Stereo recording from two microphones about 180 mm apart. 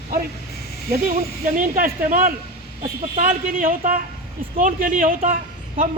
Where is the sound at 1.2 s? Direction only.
50° right (ahead or behind).